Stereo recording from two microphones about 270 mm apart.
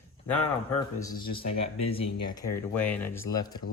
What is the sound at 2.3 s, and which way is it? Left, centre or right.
Speech, centre.